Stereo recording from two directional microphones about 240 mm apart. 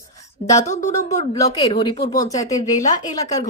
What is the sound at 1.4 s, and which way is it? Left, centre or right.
Speech, centre.